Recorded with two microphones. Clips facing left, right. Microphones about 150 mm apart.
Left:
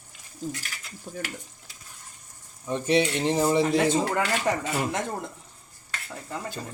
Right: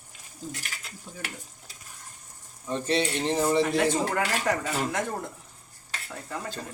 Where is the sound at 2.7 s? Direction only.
15° left (ahead or behind).